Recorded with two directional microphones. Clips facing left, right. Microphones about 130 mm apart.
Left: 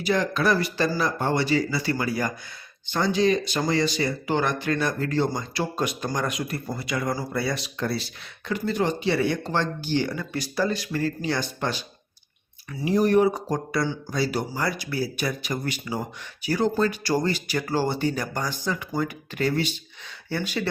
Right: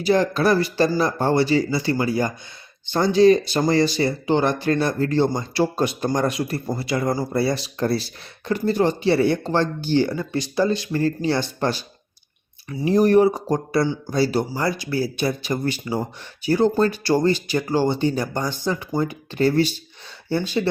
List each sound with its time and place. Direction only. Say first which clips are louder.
0.0 s speech: right 5 dB; 30° right (ahead or behind)